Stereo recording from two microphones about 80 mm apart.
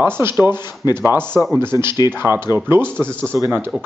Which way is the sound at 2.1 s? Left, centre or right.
Right.